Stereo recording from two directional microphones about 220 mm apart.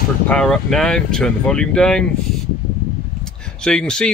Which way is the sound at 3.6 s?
5° left (ahead or behind).